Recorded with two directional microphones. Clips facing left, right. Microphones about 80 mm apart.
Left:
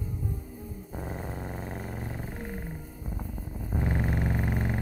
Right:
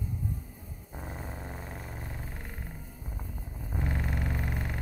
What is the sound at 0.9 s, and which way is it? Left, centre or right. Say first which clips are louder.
Dog: left 4 dB; centre.